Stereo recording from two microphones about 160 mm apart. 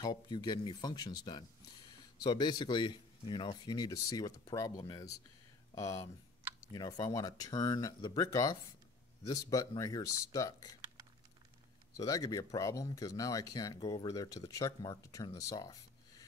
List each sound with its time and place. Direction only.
0.0 s speech: 25° left (ahead or behind)
12.0 s speech: 20° left (ahead or behind)